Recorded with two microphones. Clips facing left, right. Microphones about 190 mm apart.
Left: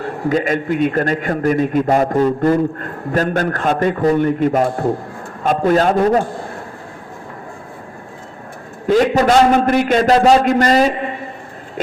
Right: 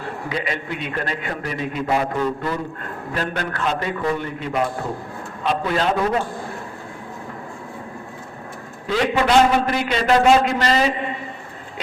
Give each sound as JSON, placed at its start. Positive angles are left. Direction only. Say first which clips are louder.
{"t": 0.3, "sound": "a man's voice", "louder": "left 11 dB", "side_deg": 45}
{"t": 8.9, "sound": "a man's voice", "louder": "left 6 dB", "side_deg": 45}